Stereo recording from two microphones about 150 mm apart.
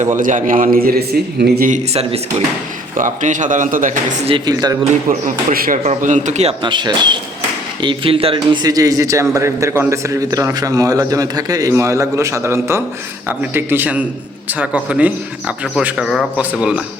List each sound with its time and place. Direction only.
0.2 s a man's voice: 60° right (ahead or behind); by 1.7 s 90° right
1.7 s speech: 45° right (ahead or behind)
3.0 s a man's voice: 60° right (ahead or behind)
4.4 s a man's voice: 25° right (ahead or behind)
5.0 s a man's voice: 60° right (ahead or behind)
5.8 s speech: 50° right (ahead or behind)
6.6 s speech: 30° right (ahead or behind)
8.6 s a man's voice: 25° right (ahead or behind); by 16.8 s 5° right (ahead or behind)